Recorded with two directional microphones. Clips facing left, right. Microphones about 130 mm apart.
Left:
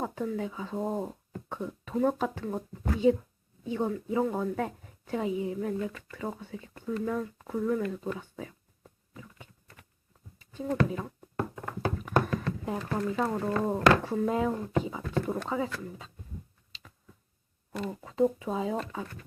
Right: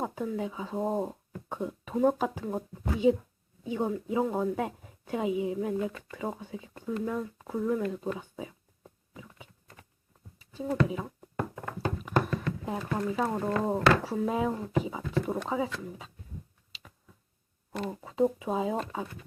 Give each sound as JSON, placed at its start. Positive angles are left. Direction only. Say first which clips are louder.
{"t": 0.0, "sound": "speech", "louder": "even", "side_deg": -10}
{"t": 10.3, "sound": "speech", "louder": "even", "side_deg": -5}
{"t": 12.3, "sound": "a sound", "louder": "left 1 dB", "side_deg": 0}
{"t": 13.3, "sound": "speech", "louder": "even", "side_deg": -15}
{"t": 17.7, "sound": "speech", "louder": "even", "side_deg": -15}